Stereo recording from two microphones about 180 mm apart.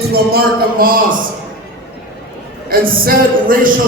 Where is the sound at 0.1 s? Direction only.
60° right (ahead or behind).